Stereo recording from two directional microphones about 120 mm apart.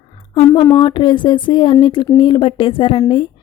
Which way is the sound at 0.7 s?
40° left (ahead or behind).